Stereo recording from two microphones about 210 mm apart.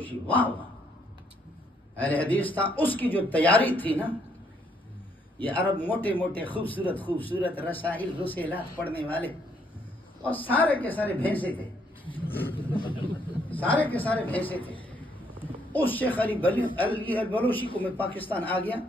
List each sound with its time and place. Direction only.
0.0 s speech: 10° left (ahead or behind)
2.0 s speech: 10° left (ahead or behind)
5.4 s speech: 10° left (ahead or behind)
10.3 s speech: 10° left (ahead or behind)
12.7 s speech: 25° left (ahead or behind)
13.5 s speech: 5° left (ahead or behind)
15.7 s speech: 10° left (ahead or behind)